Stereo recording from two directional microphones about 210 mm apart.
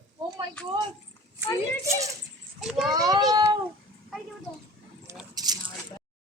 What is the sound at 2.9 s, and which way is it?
Speech, 20° right (ahead or behind).